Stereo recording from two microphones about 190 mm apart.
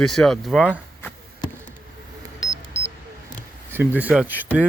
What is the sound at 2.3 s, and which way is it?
Music, 15° left (ahead or behind).